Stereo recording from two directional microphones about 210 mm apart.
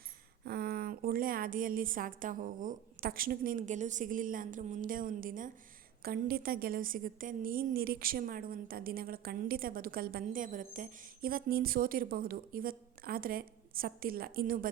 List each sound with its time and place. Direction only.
0.4 s a woman's voice: 50° right (ahead or behind)